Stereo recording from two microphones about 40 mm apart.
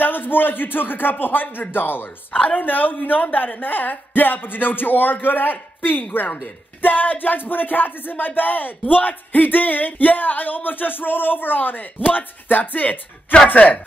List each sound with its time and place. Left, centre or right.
0.0 s speech: left
2.4 s speech: left